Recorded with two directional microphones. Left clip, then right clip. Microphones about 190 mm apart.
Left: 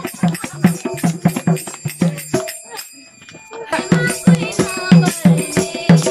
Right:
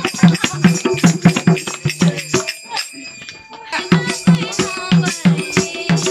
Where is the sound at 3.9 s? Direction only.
30° left (ahead or behind).